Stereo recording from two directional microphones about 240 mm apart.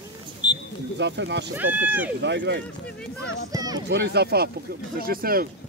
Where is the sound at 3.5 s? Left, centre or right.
Centre.